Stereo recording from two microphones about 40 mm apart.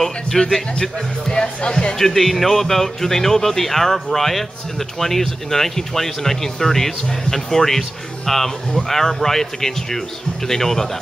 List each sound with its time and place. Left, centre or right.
0.4 s speech: centre
2.0 s speech: centre